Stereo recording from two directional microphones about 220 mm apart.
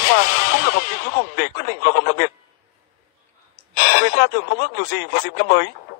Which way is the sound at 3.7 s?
40° left (ahead or behind).